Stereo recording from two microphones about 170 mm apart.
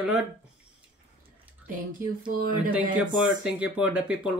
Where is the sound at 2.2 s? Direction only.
50° right (ahead or behind).